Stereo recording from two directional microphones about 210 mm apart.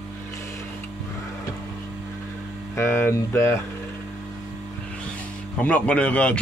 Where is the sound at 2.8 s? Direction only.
10° left (ahead or behind).